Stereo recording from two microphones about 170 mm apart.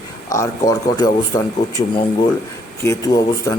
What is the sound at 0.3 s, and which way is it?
A man's voice, 20° left (ahead or behind).